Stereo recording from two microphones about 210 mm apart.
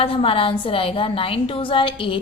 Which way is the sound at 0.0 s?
25° left (ahead or behind).